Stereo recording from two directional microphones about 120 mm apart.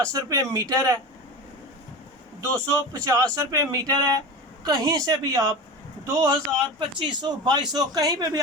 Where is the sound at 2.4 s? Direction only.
10° left (ahead or behind).